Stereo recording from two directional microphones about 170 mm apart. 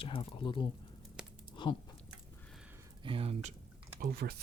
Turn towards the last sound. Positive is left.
turn(degrees=-65)  # may be behind; listen again after turning